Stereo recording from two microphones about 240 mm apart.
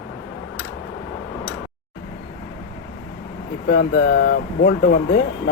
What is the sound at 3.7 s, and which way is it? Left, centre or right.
Speech, left.